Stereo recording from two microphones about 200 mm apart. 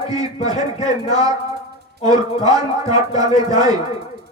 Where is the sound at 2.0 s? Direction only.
20° right (ahead or behind).